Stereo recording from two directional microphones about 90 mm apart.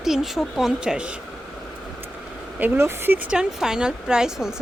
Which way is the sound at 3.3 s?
5° right (ahead or behind).